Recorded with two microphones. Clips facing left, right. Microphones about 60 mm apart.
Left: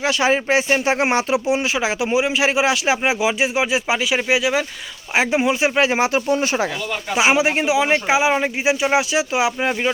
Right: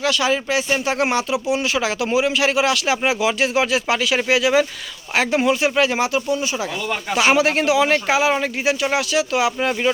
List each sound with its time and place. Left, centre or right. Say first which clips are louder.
0.0 s speech: left 1 dB; left
7.1 s speech: even; centre